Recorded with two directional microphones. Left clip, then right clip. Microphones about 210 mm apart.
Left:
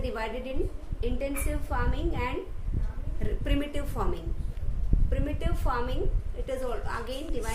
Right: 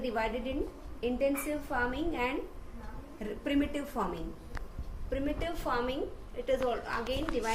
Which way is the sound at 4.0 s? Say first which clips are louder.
Left 1 dB; 25° left (ahead or behind).